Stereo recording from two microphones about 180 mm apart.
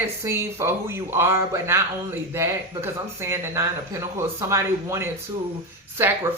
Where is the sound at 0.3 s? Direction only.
15° right (ahead or behind).